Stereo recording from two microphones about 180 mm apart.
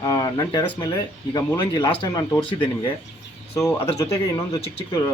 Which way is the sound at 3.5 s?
15° left (ahead or behind).